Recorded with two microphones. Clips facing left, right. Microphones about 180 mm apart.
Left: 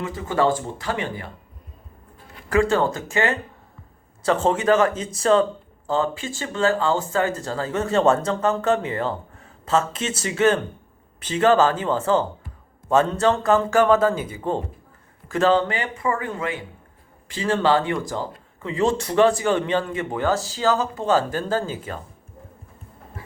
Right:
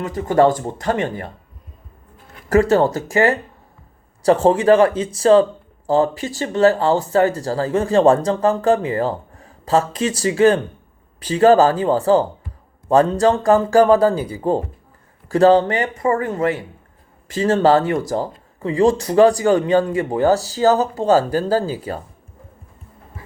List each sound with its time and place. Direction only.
0.0 s speech: 45° right (ahead or behind)
2.5 s speech: 40° right (ahead or behind)